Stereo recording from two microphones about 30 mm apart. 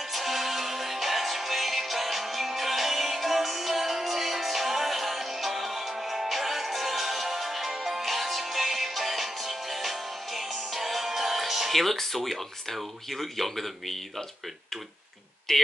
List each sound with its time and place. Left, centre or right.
0.1 s music: centre
11.7 s speech: centre
15.5 s speech: centre